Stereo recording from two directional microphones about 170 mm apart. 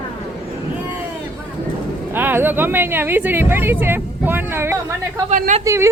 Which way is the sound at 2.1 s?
10° right (ahead or behind).